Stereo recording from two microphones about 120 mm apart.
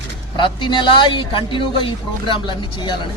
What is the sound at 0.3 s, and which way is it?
A man's voice, 40° left (ahead or behind).